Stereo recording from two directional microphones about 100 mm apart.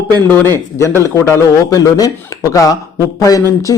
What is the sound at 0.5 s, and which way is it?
Speech, 25° left (ahead or behind).